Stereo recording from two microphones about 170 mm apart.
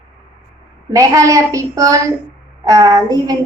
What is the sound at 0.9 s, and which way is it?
A woman's voice, 20° right (ahead or behind).